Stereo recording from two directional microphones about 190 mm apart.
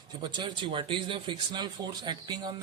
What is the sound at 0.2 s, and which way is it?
Speech, 25° right (ahead or behind).